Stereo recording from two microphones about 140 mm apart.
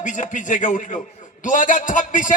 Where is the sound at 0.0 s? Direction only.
65° left (ahead or behind).